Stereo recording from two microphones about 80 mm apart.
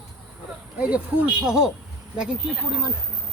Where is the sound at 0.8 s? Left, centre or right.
Centre.